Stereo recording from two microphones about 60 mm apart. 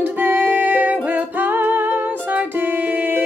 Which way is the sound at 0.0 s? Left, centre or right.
Right.